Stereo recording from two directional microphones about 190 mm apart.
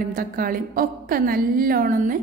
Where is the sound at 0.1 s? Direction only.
50° right (ahead or behind).